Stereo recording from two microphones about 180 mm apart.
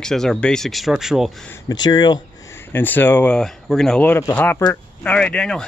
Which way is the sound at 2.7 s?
10° left (ahead or behind).